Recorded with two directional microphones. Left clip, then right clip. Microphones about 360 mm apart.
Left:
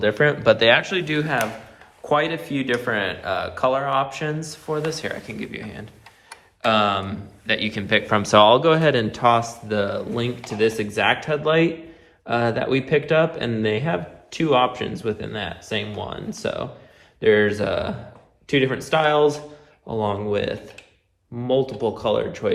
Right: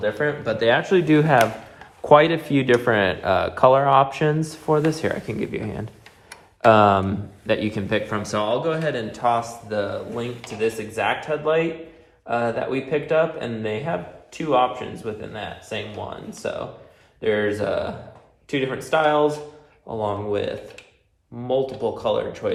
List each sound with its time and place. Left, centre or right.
0.4 s speech: centre
9.7 s a man's voice: left